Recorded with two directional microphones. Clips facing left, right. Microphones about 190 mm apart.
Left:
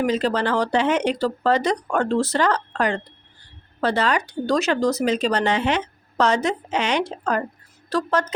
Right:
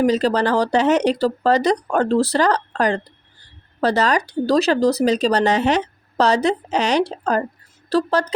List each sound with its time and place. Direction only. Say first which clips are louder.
0.0 s speech: right 4 dB; 35° right (ahead or behind)